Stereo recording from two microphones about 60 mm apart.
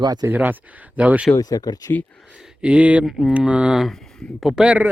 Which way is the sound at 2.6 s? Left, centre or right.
Centre.